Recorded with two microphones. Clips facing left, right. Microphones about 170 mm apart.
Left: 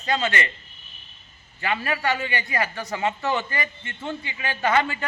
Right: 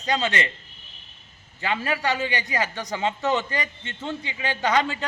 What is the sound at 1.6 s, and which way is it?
A man's voice, 20° right (ahead or behind).